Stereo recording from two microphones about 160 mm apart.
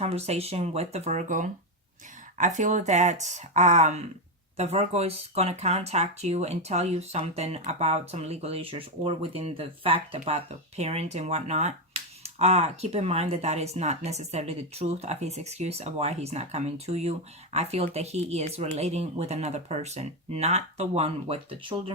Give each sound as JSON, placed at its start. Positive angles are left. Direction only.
{"t": 0.0, "sound": "speech", "side_deg": -40}